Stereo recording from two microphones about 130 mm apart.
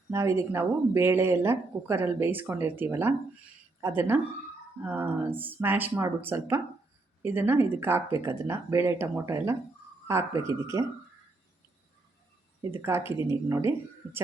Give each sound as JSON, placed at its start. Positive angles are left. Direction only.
{"t": 0.1, "sound": "speech", "side_deg": -20}
{"t": 12.7, "sound": "speech", "side_deg": -20}